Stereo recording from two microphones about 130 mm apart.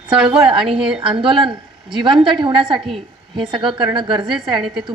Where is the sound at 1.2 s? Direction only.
40° right (ahead or behind).